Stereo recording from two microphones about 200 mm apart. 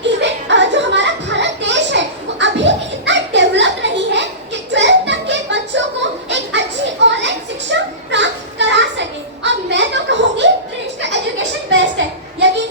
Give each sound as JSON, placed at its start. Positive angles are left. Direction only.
{"t": 0.0, "sound": "music", "side_deg": -60}
{"t": 6.3, "sound": "children playing", "side_deg": -60}
{"t": 11.0, "sound": "a sound", "side_deg": -65}